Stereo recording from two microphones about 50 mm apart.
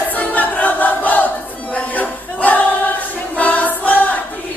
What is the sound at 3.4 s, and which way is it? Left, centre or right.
Choir, left.